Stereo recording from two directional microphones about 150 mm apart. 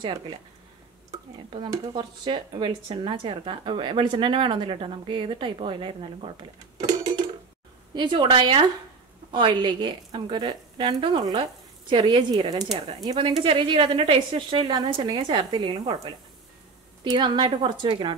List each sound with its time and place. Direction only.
0.0 s speech: 30° right (ahead or behind)
1.9 s speech: 30° right (ahead or behind)
6.8 s a sound: 25° right (ahead or behind)
7.9 s speech: 30° right (ahead or behind)